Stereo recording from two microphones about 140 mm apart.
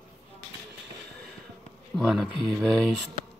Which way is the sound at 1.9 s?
Centre (ahead or behind).